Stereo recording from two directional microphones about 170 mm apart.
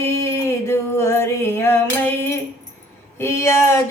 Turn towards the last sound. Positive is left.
turn(degrees=15)  # may be behind; listen again after turning